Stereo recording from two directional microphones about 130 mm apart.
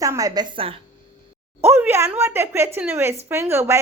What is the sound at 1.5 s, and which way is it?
A woman's voice, 20° right (ahead or behind).